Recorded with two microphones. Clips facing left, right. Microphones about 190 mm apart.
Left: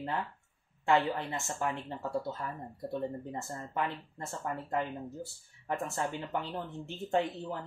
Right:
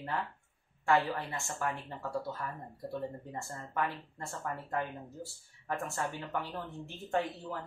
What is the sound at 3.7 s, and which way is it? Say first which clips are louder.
Speech: even; 25° left (ahead or behind).